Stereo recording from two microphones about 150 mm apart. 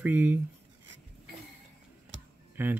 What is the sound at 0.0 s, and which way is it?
Speech, 10° right (ahead or behind).